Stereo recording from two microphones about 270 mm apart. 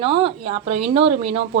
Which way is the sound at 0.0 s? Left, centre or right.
Centre.